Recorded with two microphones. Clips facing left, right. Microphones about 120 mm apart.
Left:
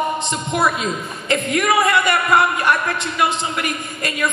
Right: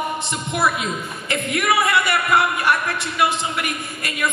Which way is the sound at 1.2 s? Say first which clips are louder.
Left 3 dB; 25° left (ahead or behind).